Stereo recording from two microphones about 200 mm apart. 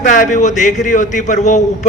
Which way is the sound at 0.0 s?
40° left (ahead or behind).